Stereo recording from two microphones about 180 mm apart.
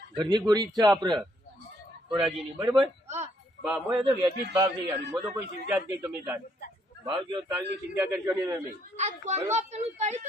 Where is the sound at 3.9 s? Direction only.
20° right (ahead or behind).